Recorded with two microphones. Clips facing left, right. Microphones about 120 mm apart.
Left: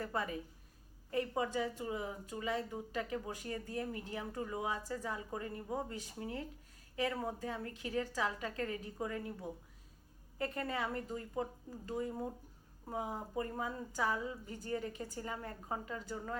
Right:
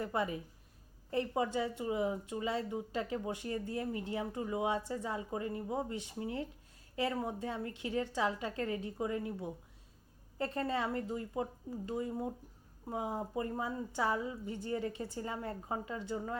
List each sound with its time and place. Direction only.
0.0 s a woman's voice: 20° right (ahead or behind)